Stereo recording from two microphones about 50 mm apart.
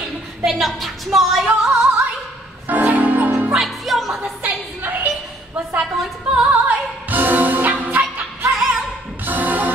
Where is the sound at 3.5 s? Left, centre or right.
Centre.